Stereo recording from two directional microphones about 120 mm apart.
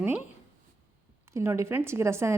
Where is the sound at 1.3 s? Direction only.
25° right (ahead or behind).